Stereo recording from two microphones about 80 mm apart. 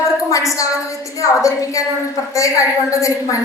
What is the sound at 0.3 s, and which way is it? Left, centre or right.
A woman's voice, left.